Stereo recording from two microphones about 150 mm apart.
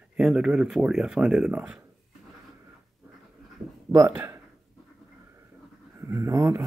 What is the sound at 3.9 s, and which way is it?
Speech, 25° right (ahead or behind).